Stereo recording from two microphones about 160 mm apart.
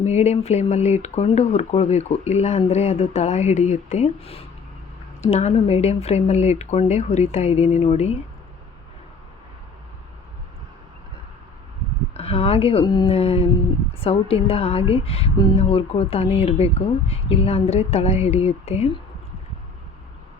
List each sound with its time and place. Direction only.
0.0 s speech: 45° left (ahead or behind)
12.1 s speech: 40° left (ahead or behind)
13.1 s a woman's voice: 40° left (ahead or behind)